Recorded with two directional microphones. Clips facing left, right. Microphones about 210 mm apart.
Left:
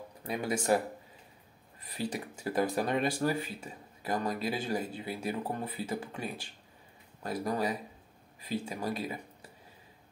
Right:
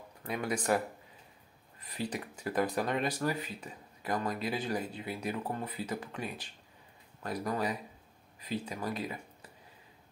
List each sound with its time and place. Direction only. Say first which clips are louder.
0.2 s speech: left 1 dB; 25° left (ahead or behind)
2.0 s speech: left 3 dB; 30° left (ahead or behind)